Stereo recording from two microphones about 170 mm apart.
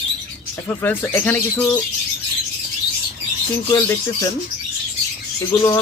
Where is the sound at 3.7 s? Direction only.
20° left (ahead or behind).